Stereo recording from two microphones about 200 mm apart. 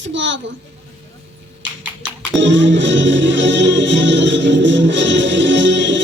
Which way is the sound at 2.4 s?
65° right (ahead or behind).